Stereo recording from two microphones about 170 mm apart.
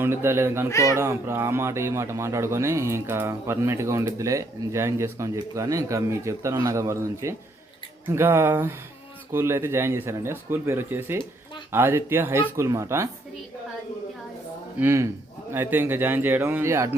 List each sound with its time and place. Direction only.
0.0 s speech: 15° right (ahead or behind)
0.7 s speech: 20° left (ahead or behind)
0.9 s speech: 15° right (ahead or behind)
14.8 s speech: 15° right (ahead or behind)